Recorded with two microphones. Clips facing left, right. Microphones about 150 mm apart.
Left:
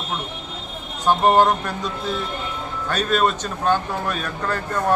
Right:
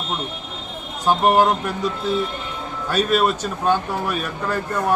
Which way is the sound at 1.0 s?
10° right (ahead or behind).